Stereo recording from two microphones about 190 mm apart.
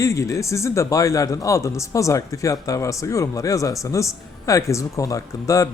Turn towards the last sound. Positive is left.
turn(degrees=15)  # may be behind; listen again after turning